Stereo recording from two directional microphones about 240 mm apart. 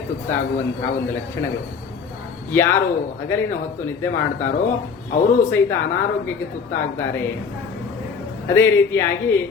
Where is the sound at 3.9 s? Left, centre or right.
Centre.